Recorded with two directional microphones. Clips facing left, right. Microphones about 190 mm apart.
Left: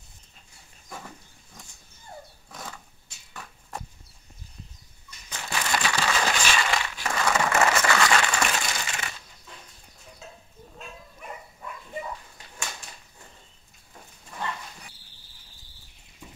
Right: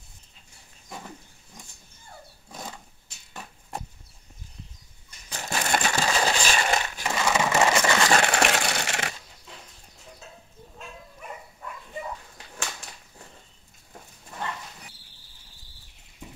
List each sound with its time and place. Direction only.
5.3 s crushing: 40° right (ahead or behind)
7.0 s a sound: 20° right (ahead or behind)
8.2 s crushing: 65° right (ahead or behind)